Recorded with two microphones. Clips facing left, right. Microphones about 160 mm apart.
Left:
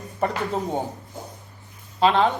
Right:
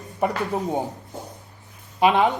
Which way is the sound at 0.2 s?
15° right (ahead or behind).